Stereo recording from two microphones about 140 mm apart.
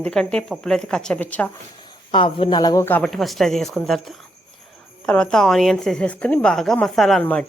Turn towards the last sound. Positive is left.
turn(degrees=5)  # may be behind; listen again after turning